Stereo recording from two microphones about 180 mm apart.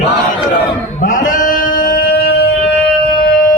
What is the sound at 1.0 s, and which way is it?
Music, 45° left (ahead or behind).